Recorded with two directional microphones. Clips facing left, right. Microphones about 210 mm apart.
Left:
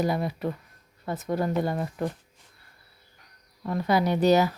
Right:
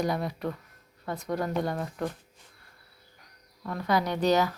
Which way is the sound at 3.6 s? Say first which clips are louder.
Left 6 dB; 20° left (ahead or behind).